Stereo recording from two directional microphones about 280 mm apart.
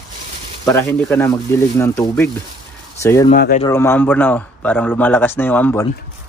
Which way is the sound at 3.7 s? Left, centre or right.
Centre.